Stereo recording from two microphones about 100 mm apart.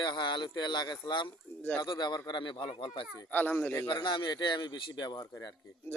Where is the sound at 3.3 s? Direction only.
20° left (ahead or behind).